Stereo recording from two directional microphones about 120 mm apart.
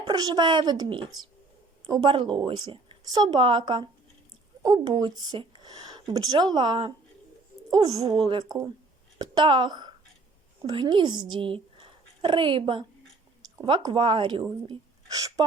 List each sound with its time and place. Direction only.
0.0 s a woman's voice: 35° right (ahead or behind)
8.0 s a woman's voice: 50° right (ahead or behind)
14.7 s a sound: 30° right (ahead or behind)